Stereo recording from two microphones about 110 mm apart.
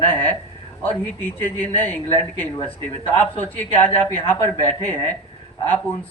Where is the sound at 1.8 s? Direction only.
15° left (ahead or behind).